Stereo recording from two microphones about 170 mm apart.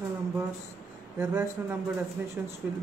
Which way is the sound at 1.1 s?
10° right (ahead or behind).